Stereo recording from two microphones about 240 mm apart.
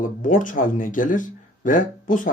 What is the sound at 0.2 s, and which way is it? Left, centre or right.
Speech, left.